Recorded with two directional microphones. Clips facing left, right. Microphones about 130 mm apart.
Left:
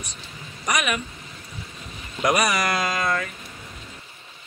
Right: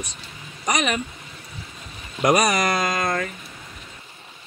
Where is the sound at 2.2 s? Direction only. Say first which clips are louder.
Right 3 dB; 40° right (ahead or behind).